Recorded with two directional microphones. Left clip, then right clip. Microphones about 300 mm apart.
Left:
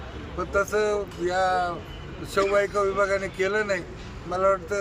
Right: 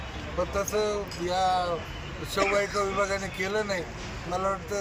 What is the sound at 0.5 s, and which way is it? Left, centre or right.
Speech, centre.